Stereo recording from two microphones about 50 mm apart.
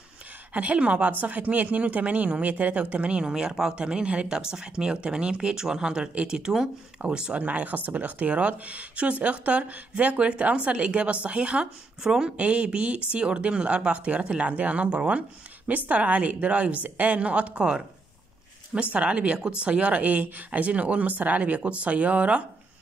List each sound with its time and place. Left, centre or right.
0.5 s speech: right
12.4 s speech: right